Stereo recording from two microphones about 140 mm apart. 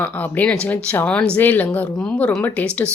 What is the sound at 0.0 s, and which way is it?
Speech, 10° left (ahead or behind).